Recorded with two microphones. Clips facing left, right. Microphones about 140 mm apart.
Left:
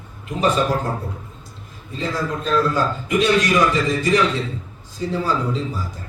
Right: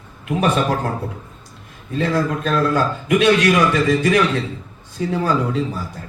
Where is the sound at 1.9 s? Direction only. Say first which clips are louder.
Right 5 dB; 60° right (ahead or behind).